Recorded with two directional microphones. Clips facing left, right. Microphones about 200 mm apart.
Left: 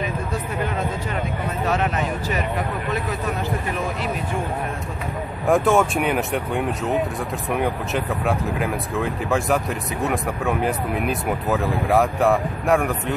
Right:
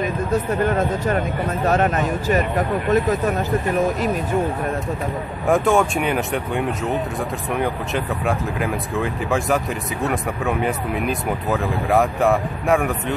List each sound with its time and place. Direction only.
0.0 s speech: 45° right (ahead or behind)
5.5 s speech: centre (ahead or behind)